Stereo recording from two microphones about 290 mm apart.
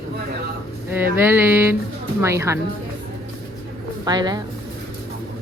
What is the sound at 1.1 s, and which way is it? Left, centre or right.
Music, centre.